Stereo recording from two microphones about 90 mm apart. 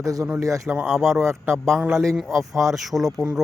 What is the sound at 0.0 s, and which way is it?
Speech, 40° right (ahead or behind).